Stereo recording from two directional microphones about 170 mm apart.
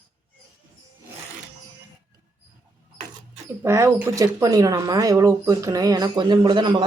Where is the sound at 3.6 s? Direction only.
15° right (ahead or behind).